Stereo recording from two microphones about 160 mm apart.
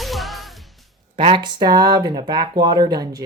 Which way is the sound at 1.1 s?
30° right (ahead or behind).